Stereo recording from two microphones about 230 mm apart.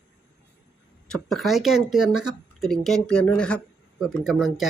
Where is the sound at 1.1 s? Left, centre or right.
Centre.